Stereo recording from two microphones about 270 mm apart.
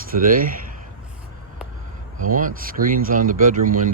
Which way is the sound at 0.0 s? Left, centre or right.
Right.